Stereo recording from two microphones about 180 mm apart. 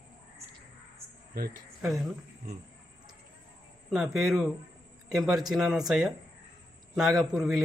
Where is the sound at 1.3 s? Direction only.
55° right (ahead or behind).